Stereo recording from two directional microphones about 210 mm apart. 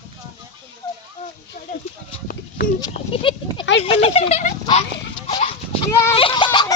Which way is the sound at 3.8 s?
30° left (ahead or behind).